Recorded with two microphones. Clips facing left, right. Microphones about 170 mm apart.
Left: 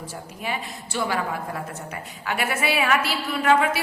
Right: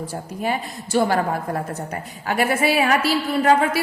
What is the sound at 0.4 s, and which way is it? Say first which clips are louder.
A woman's voice: right 5 dB; 45° right (ahead or behind).